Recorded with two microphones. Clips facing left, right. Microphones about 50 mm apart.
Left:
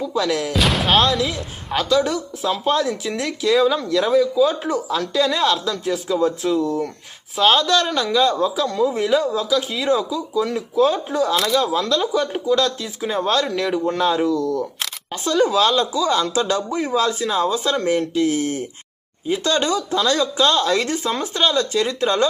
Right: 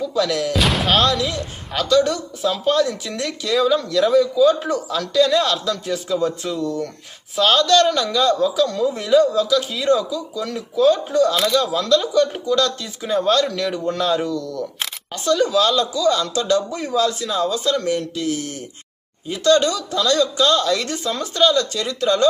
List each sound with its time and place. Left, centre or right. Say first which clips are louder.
0.2 s speech: right 1 dB; centre
15.1 s speech: even; left